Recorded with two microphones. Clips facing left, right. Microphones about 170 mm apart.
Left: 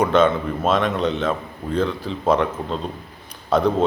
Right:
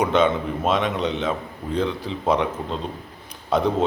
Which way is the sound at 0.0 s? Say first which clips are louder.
Left 2 dB; 20° right (ahead or behind).